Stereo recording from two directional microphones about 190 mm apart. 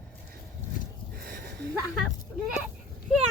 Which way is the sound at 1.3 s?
50° right (ahead or behind).